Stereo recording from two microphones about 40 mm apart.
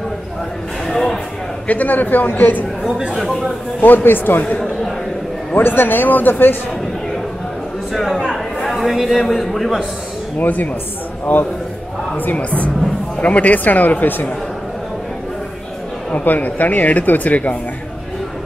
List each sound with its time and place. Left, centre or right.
0.8 s a sound: centre
1.7 s speech: left
3.2 s speech: centre
3.8 s speech: left
5.6 s speech: left
7.9 s a sound: centre
8.6 s a man's voice: centre
10.4 s speech: left
11.3 s a woman's voice: left
16.3 s speech: left